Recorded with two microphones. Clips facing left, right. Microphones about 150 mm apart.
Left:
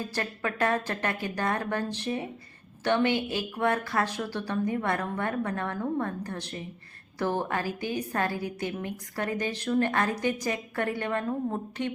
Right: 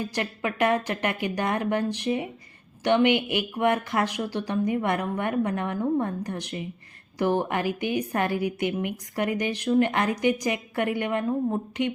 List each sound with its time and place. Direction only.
0.0 s speech: 15° right (ahead or behind)